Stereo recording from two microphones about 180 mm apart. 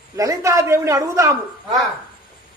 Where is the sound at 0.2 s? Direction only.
20° right (ahead or behind).